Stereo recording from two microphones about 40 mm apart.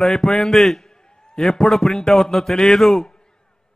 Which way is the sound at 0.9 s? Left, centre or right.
Centre.